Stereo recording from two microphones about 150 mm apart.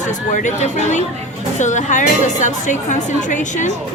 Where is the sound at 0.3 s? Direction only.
55° left (ahead or behind).